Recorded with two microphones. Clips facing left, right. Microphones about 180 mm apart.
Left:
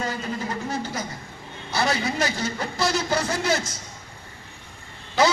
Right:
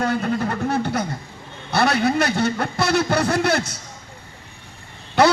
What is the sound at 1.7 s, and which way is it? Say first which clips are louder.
A man's voice: right 6 dB; 65° right (ahead or behind).